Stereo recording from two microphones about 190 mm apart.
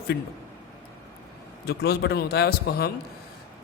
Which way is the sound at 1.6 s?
55° left (ahead or behind).